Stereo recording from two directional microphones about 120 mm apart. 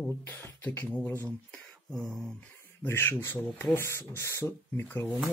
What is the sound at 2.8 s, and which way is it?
Speech, 20° left (ahead or behind).